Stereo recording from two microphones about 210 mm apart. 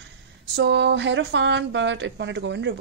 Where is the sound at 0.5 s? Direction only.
60° right (ahead or behind).